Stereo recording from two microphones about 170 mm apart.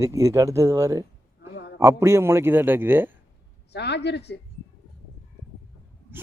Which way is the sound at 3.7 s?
80° left.